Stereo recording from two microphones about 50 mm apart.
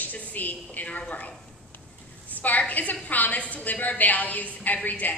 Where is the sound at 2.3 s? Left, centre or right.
Left.